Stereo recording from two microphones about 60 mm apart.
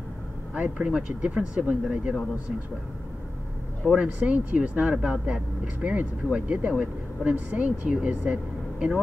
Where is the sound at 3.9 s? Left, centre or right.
Right.